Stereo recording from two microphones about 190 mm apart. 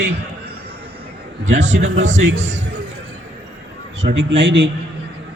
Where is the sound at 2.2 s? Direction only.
80° right.